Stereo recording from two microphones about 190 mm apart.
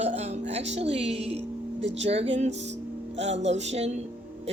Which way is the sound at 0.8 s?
30° right (ahead or behind).